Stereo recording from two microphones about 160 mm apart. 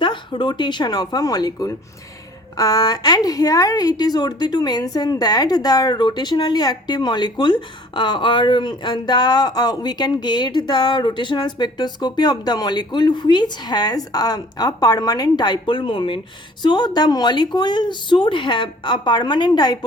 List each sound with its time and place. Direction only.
0.0 s a woman's voice: 30° left (ahead or behind)